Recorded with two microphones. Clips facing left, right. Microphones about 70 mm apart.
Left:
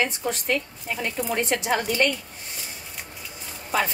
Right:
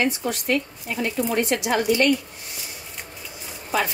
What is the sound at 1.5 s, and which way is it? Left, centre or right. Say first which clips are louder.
Speech: right 3 dB; left.